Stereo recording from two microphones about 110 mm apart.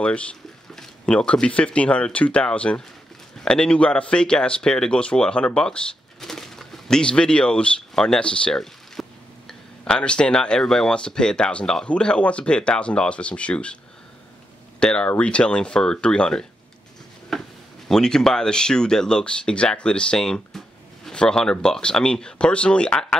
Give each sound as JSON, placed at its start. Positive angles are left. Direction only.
{"t": 0.0, "sound": "speech", "side_deg": 10}
{"t": 14.8, "sound": "speech", "side_deg": 10}
{"t": 17.3, "sound": "a sound", "side_deg": 0}
{"t": 17.8, "sound": "speech", "side_deg": 5}